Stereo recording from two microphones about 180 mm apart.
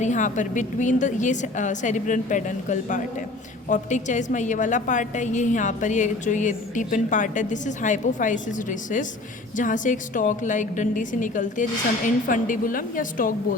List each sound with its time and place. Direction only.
0.0 s a woman's voice: 45° left (ahead or behind)